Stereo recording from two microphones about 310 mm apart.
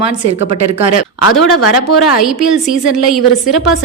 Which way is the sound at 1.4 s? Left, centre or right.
Centre.